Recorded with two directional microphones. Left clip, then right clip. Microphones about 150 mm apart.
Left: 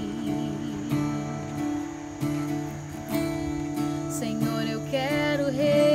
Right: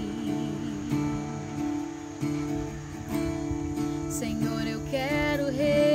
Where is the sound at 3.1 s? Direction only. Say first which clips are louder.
Left 2 dB; 30° left (ahead or behind).